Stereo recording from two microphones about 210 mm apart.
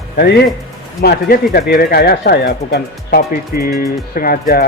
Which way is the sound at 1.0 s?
45° left (ahead or behind).